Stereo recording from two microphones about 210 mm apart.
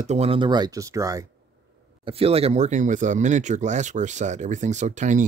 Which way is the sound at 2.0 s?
30° right (ahead or behind).